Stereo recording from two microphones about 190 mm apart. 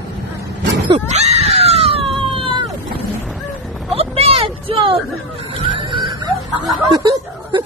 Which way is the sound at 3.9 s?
30° right (ahead or behind).